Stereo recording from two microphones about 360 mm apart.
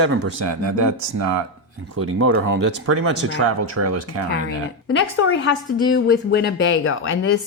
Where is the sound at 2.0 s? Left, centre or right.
Right.